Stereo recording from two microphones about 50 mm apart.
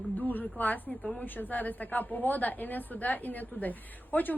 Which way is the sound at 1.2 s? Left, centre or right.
Left.